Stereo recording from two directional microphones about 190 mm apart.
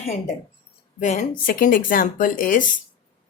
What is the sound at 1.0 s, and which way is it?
Speech, 40° left (ahead or behind).